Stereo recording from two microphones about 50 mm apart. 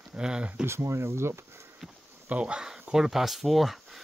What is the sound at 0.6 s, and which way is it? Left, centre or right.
Speech, right.